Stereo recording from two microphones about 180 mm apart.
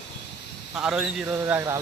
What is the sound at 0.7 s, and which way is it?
Speech, 5° right (ahead or behind).